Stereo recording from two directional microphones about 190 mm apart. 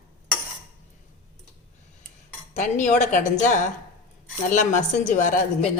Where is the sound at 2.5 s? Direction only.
40° left (ahead or behind).